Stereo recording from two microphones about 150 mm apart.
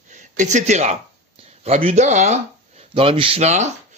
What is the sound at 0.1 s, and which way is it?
Speech, 55° right (ahead or behind).